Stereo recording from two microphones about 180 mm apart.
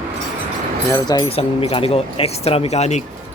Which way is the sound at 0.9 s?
20° left (ahead or behind).